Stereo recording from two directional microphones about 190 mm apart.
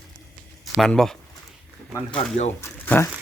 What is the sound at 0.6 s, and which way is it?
Speech, centre (ahead or behind).